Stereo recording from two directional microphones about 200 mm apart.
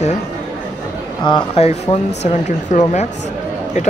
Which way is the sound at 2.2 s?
35° left (ahead or behind).